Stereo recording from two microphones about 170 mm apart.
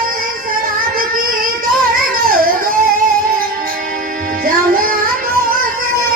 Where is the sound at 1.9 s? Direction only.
55° right (ahead or behind).